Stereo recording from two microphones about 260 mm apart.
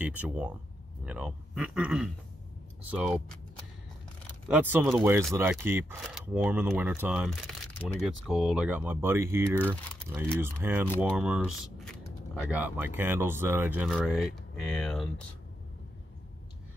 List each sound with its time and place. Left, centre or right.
0.0 s speech: centre
4.5 s speech: centre